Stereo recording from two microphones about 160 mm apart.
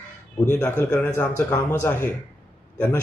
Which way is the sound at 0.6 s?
15° left (ahead or behind).